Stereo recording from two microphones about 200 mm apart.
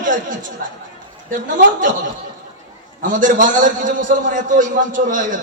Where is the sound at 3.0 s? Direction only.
40° right (ahead or behind).